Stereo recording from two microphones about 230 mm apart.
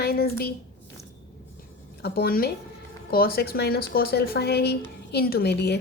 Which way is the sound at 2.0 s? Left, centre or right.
Left.